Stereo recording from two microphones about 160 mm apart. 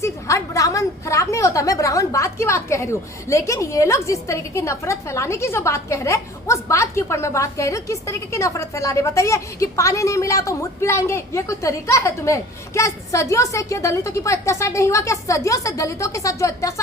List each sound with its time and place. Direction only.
0.0 s a woman's voice: 20° left (ahead or behind)